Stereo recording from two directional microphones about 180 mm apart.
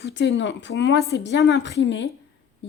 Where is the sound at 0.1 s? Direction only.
85° left.